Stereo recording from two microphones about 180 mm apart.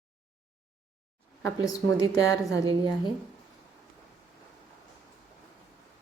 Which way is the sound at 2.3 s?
20° left (ahead or behind).